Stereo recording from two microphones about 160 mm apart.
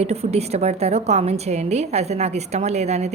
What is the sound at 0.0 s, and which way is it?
A woman's voice, 40° right (ahead or behind).